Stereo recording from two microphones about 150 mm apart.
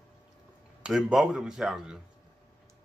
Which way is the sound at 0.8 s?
5° right (ahead or behind).